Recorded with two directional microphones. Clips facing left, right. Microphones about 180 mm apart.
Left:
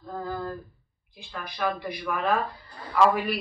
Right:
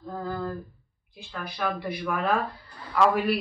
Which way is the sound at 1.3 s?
Centre (ahead or behind).